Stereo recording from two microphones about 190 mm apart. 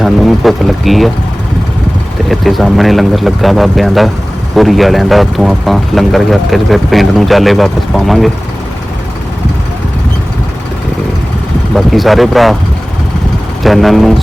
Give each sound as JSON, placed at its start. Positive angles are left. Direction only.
{"t": 0.0, "sound": "speech", "side_deg": 0}
{"t": 2.3, "sound": "speech", "side_deg": 0}
{"t": 11.7, "sound": "speech", "side_deg": 0}
{"t": 13.6, "sound": "speech", "side_deg": 0}